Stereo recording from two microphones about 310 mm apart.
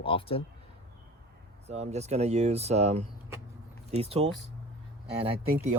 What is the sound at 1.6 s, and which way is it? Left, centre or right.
Speech, right.